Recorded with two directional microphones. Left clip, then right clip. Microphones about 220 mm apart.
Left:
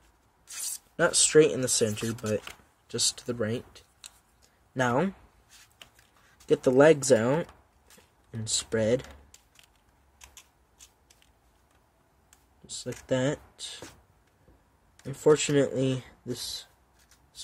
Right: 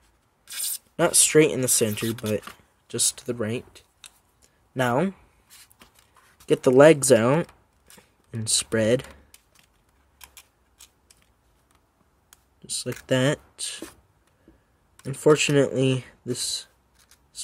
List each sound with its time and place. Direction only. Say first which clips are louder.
0.6 s speech: right 3 dB; 25° right (ahead or behind)
4.4 s a sound: right 3 dB; 20° right (ahead or behind)
6.4 s speech: right 5 dB; 25° right (ahead or behind)
12.6 s speech: right 5 dB; 30° right (ahead or behind)
15.0 s speech: right 4 dB; 25° right (ahead or behind)